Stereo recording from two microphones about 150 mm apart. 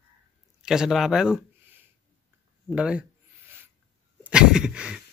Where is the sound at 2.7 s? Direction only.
5° right (ahead or behind).